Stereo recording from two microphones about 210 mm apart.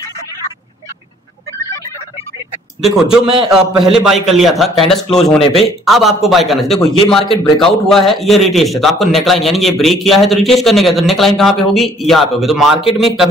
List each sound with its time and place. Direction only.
2.8 s a man's voice: centre (ahead or behind)
3.3 s a man's voice: 25° right (ahead or behind)
3.5 s a man's voice: centre (ahead or behind)